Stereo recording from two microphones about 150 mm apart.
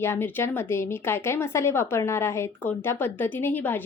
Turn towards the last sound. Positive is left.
turn(degrees=10)  # may be behind; listen again after turning